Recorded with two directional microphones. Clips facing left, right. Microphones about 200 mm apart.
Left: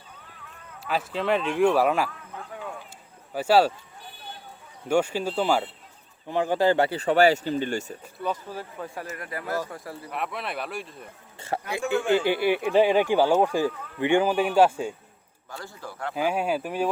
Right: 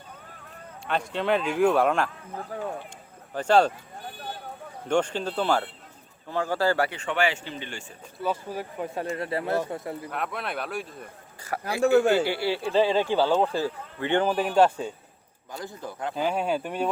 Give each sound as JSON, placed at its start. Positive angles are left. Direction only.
{"t": 0.9, "sound": "speech", "side_deg": 5}
{"t": 2.3, "sound": "speech", "side_deg": -40}
{"t": 3.3, "sound": "speech", "side_deg": 5}
{"t": 4.9, "sound": "speech", "side_deg": 10}
{"t": 6.9, "sound": "speech", "side_deg": 35}
{"t": 8.2, "sound": "speech", "side_deg": -10}
{"t": 9.0, "sound": "speech", "side_deg": -30}
{"t": 10.1, "sound": "speech", "side_deg": 0}
{"t": 11.3, "sound": "a man's voice", "side_deg": 25}
{"t": 15.5, "sound": "speech", "side_deg": -20}
{"t": 16.1, "sound": "speech", "side_deg": 5}